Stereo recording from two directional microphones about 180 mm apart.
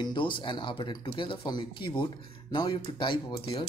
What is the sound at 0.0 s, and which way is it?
Speech, 25° left (ahead or behind).